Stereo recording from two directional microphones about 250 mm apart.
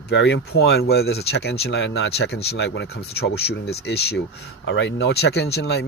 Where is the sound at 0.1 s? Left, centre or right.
Left.